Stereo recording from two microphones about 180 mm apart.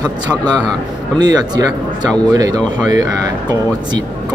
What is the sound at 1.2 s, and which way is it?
Speech, 20° right (ahead or behind).